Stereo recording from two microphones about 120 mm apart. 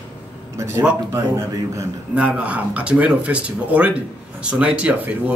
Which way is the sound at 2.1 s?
10° right (ahead or behind).